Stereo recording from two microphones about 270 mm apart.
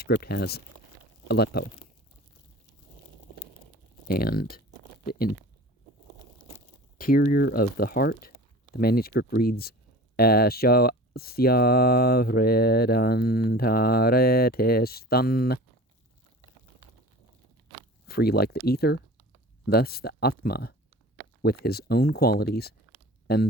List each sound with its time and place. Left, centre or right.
0.0 s speech: left
4.1 s speech: left
7.0 s speech: left
18.1 s speech: left